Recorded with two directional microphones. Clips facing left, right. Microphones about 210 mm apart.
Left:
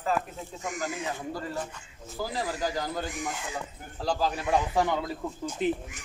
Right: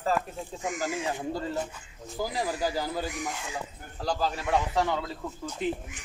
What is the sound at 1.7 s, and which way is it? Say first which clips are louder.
Speech: right 2 dB; centre (ahead or behind).